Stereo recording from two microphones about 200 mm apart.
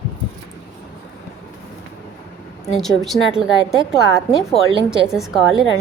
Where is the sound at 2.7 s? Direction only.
Centre (ahead or behind).